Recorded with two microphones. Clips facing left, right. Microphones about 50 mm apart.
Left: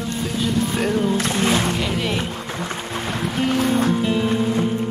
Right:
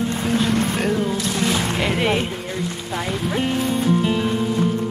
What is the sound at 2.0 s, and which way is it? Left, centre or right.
Speech, right.